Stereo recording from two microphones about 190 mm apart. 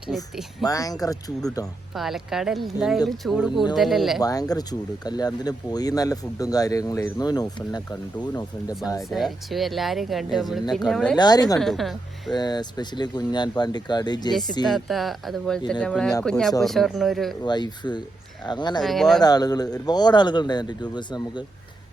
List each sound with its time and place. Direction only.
0.6 s speech: 20° left (ahead or behind)
2.0 s speech: centre (ahead or behind)
4.2 s speech: 20° left (ahead or behind)
9.0 s speech: centre (ahead or behind)
11.2 s speech: 20° left (ahead or behind)
11.6 s speech: centre (ahead or behind)
12.3 s speech: 20° left (ahead or behind)
14.7 s speech: centre (ahead or behind)
17.4 s speech: 25° left (ahead or behind)
18.8 s speech: centre (ahead or behind)
19.2 s speech: 20° left (ahead or behind)